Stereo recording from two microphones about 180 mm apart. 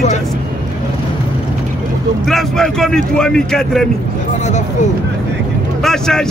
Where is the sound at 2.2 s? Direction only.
Centre (ahead or behind).